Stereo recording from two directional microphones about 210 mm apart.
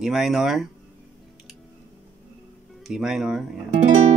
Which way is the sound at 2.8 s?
Centre (ahead or behind).